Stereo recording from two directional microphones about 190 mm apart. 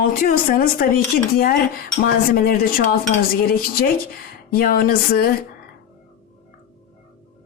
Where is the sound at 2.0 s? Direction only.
50° left (ahead or behind).